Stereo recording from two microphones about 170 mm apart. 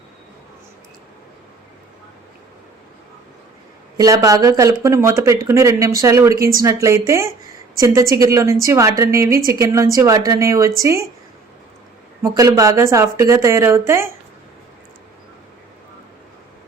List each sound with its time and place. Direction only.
3.9 s a woman's voice: 20° right (ahead or behind)
12.2 s speech: 20° right (ahead or behind)